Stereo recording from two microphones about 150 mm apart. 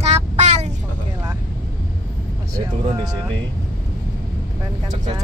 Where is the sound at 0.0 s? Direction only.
45° right (ahead or behind).